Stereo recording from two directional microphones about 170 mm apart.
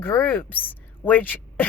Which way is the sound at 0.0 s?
10° left (ahead or behind).